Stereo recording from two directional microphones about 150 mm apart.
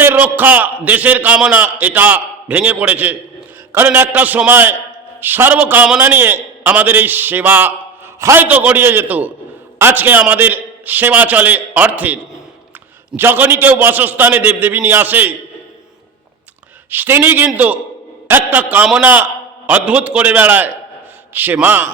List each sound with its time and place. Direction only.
0.0 s a man's voice: 10° right (ahead or behind)
16.9 s a man's voice: 15° right (ahead or behind)